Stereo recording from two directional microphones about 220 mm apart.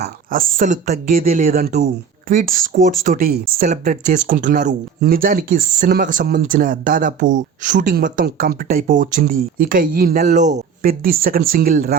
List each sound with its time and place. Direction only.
0.0 s speech: 40° right (ahead or behind)